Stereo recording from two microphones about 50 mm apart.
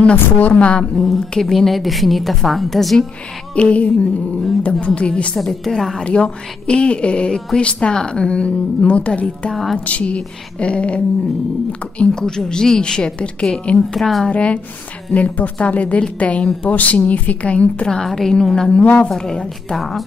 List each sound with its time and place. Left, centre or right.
0.1 s a woman's voice: left
0.9 s a woman's voice: centre
3.5 s a woman's voice: left
5.4 s a woman's voice: centre
6.0 s a woman's voice: left
9.5 s a woman's voice: centre
9.8 s a woman's voice: left
12.1 s a woman's voice: centre
13.9 s a woman's voice: centre
14.3 s a woman's voice: left
17.8 s a woman's voice: centre